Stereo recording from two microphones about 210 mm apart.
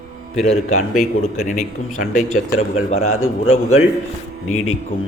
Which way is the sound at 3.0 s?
85° left.